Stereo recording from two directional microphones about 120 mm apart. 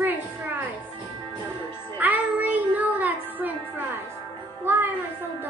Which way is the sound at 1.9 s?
15° right (ahead or behind).